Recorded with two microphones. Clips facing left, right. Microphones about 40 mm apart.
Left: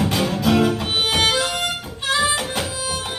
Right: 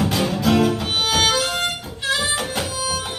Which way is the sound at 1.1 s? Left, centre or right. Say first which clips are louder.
Right 1 dB; centre.